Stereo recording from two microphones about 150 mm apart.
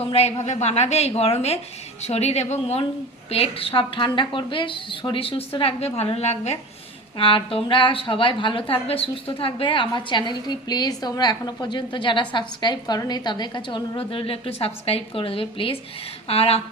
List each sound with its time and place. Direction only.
0.0 s a woman's voice: 45° left (ahead or behind)